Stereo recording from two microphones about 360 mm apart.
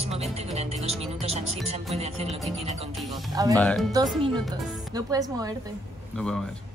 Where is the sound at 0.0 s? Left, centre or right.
Centre.